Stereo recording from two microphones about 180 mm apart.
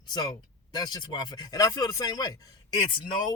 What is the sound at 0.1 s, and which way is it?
Speech, 20° left (ahead or behind).